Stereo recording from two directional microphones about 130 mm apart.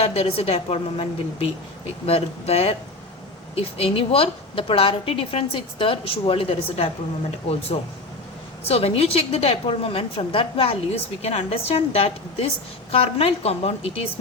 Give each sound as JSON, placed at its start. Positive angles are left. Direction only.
{"t": 0.0, "sound": "a woman's voice", "side_deg": 50}
{"t": 8.6, "sound": "a woman's voice", "side_deg": 50}